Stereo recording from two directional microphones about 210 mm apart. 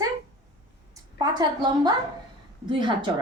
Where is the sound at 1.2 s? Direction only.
20° right (ahead or behind).